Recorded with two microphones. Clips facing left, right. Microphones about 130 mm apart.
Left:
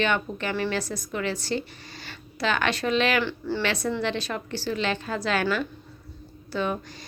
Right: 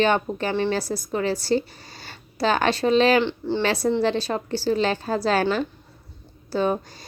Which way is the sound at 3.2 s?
20° right (ahead or behind).